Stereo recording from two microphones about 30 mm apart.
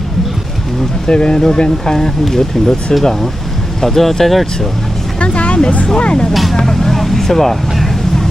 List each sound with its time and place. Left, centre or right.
1.0 s speech: left
2.0 s speech: centre
5.2 s speech: left
6.5 s speech: centre